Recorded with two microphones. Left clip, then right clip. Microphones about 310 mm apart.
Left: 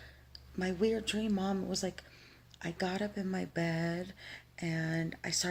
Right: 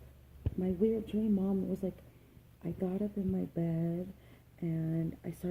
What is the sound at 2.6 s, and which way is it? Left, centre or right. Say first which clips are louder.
Speech: left 2 dB; left.